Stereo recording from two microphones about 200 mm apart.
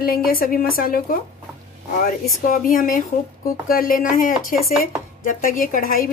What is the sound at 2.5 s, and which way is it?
Speech, 45° left (ahead or behind).